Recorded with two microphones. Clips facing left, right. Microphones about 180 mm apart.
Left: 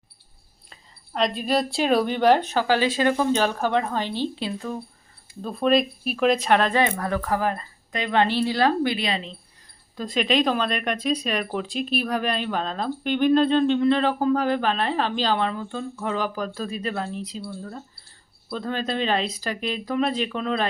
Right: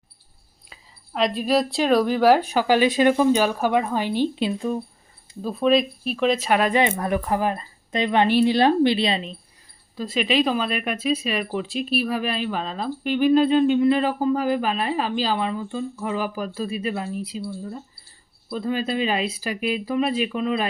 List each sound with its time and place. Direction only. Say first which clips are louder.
0.7 s a woman's voice: even; 5° right (ahead or behind); by 4.7 s 20° right (ahead or behind)
5.4 s a woman's voice: right 1 dB; 5° right (ahead or behind); by 9.3 s 25° right (ahead or behind)
10.0 s a woman's voice: right 1 dB; 5° right (ahead or behind)